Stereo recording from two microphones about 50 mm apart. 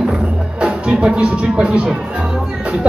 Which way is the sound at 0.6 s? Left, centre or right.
Right.